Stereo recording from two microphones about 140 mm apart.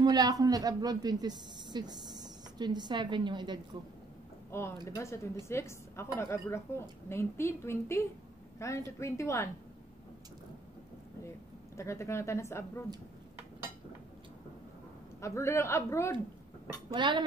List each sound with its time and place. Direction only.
0.0 s a woman's voice: 30° right (ahead or behind)
4.5 s a woman's voice: 20° left (ahead or behind)
11.7 s a woman's voice: 20° left (ahead or behind)
15.1 s a woman's voice: 20° left (ahead or behind)
16.9 s speech: 35° right (ahead or behind)